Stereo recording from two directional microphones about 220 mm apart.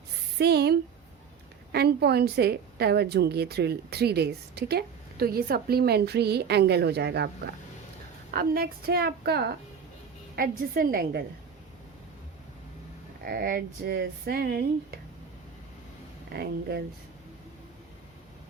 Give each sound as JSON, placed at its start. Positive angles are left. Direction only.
{"t": 0.3, "sound": "a woman's voice", "side_deg": -45}
{"t": 10.8, "sound": "a woman's voice", "side_deg": -45}
{"t": 13.2, "sound": "a woman's voice", "side_deg": -45}
{"t": 16.3, "sound": "a woman's voice", "side_deg": -45}